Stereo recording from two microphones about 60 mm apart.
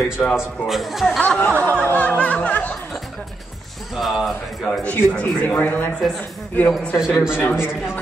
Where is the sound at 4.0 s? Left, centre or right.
Centre.